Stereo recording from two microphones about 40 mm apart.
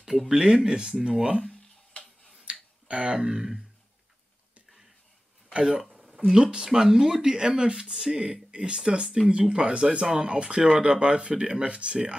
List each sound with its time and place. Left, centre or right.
0.3 s speech: centre
2.4 s finger snapping: right
3.2 s speech: centre
5.5 s speech: right
5.9 s a sound: centre
6.3 s speech: right